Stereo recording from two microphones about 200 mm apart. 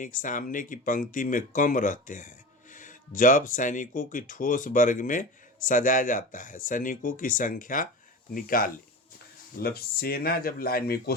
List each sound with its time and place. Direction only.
0.0 s speech: 40° left (ahead or behind)